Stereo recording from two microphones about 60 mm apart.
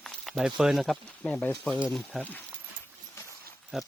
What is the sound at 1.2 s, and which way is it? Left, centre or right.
Speech, left.